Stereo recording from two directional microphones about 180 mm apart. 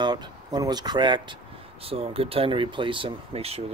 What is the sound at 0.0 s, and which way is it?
Speech, 25° right (ahead or behind).